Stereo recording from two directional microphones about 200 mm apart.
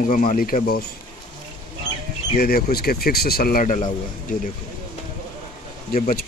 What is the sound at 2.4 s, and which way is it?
Speech, 50° left (ahead or behind).